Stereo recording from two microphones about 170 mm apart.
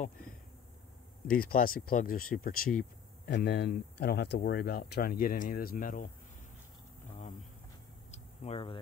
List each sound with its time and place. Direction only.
1.2 s speech: 60° left (ahead or behind)
2.8 s speech: 80° left; by 6.1 s 55° left (ahead or behind)
8.1 s a sound: 35° left (ahead or behind)